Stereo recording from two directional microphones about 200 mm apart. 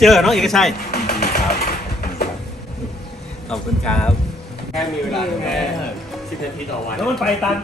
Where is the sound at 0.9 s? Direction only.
55° left (ahead or behind).